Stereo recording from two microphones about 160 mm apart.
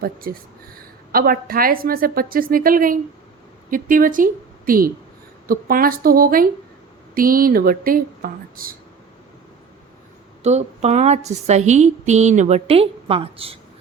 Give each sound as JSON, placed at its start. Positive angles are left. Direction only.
{"t": 0.0, "sound": "a woman's voice", "side_deg": -70}
{"t": 10.4, "sound": "a woman's voice", "side_deg": -45}